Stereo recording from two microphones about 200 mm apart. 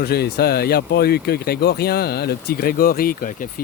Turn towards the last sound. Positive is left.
turn(degrees=40)  # may be behind; listen again after turning